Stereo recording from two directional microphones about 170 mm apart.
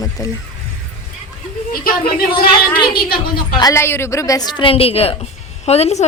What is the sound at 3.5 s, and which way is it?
A woman's voice, 20° left (ahead or behind).